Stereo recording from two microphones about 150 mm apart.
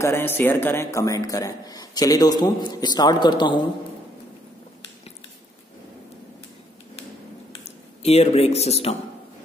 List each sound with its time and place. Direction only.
0.0 s a man's voice: 15° left (ahead or behind); by 3.6 s 30° left (ahead or behind)
7.6 s speech: 45° left (ahead or behind)